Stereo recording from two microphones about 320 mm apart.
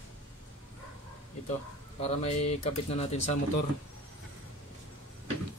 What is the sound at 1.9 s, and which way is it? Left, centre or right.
Speech, centre.